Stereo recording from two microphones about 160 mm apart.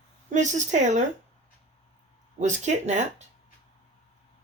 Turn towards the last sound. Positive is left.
turn(degrees=-45)  # may be behind; listen again after turning